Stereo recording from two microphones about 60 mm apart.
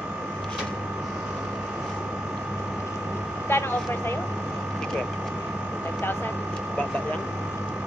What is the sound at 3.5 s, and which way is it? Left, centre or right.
Speech, left.